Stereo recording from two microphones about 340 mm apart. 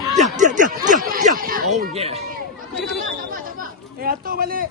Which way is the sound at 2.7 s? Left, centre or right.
Centre.